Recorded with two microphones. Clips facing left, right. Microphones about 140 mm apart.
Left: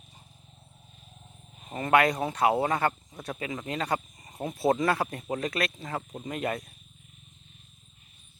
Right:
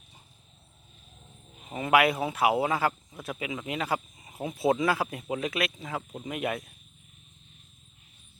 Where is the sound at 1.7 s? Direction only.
5° right (ahead or behind).